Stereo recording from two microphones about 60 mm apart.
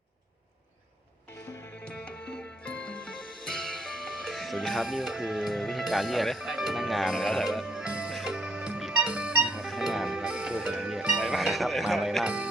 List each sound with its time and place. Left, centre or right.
1.9 s music: centre
9.6 s music: centre
11.3 s speech: centre
12.2 s speech: right